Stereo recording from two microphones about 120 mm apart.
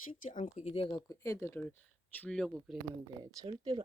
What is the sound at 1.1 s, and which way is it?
Speech, 30° left (ahead or behind).